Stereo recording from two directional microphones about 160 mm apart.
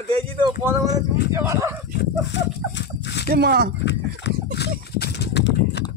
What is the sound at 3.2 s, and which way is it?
Speech, 80° right.